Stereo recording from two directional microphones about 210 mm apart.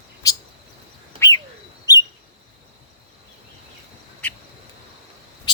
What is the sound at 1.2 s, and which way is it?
Bird, 15° left (ahead or behind).